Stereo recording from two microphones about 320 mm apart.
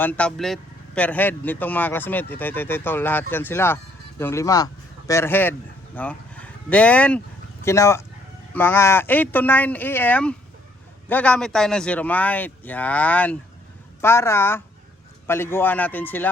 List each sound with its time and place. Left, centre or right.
0.0 s speech: centre